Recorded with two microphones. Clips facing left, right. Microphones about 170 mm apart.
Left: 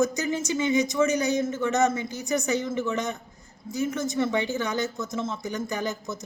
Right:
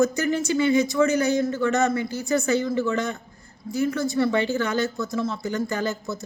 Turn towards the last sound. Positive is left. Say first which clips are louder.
# right 3 dB
turn(degrees=15)  # may be behind; listen again after turning